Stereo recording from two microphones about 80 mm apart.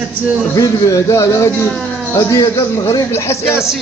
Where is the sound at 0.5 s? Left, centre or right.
Left.